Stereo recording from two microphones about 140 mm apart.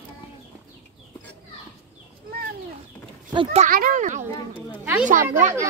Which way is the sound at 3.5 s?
80° right.